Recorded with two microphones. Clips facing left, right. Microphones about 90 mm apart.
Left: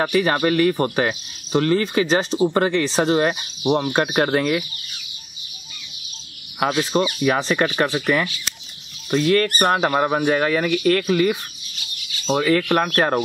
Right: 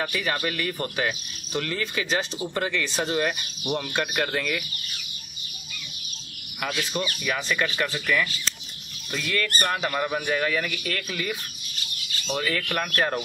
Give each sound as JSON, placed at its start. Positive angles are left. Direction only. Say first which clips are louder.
{"t": 0.0, "sound": "speech", "louder": "left 9 dB", "side_deg": 40}
{"t": 3.6, "sound": "speech", "louder": "left 8 dB", "side_deg": 50}
{"t": 6.7, "sound": "speech", "louder": "left 8 dB", "side_deg": 30}
{"t": 12.4, "sound": "speech", "louder": "left 10 dB", "side_deg": 40}